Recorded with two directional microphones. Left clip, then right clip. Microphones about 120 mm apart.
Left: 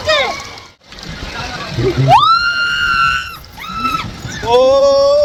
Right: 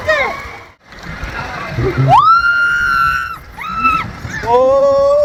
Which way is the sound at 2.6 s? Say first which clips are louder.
Right 1 dB; 80° left.